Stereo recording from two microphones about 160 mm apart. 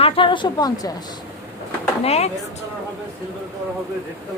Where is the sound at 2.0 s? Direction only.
40° left (ahead or behind).